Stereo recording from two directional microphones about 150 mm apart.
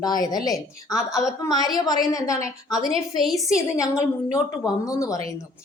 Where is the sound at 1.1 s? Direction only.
Centre (ahead or behind).